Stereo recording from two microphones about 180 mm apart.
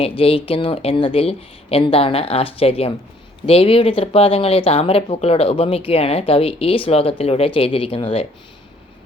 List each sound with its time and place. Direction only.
0.2 s speech: 30° left (ahead or behind)